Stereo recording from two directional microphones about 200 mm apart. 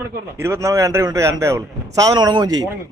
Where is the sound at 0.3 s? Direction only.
15° right (ahead or behind).